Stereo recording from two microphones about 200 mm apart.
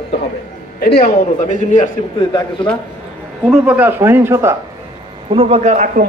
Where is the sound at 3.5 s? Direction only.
10° right (ahead or behind).